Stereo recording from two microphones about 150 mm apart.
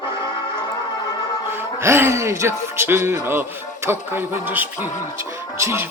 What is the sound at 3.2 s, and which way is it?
Speech, 15° right (ahead or behind).